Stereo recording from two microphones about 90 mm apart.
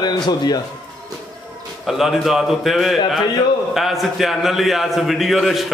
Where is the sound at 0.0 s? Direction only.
50° left (ahead or behind).